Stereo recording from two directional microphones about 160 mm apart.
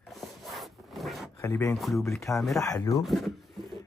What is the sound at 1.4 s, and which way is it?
Speech, 15° left (ahead or behind).